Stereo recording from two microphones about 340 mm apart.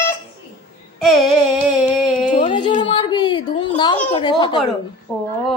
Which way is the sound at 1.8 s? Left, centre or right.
Centre.